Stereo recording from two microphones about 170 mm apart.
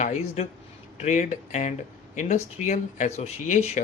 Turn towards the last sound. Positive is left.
turn(degrees=40)  # may be behind; listen again after turning